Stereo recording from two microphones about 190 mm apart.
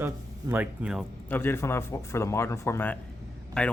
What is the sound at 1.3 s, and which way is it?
Speech, 10° left (ahead or behind).